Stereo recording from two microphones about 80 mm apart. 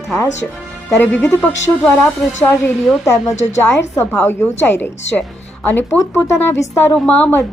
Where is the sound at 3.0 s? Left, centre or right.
Left.